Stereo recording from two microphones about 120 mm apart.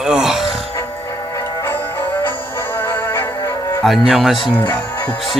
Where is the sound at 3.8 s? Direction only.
Centre (ahead or behind).